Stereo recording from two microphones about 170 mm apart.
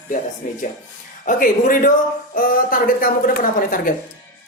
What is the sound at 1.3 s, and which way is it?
A woman's voice, 50° left (ahead or behind).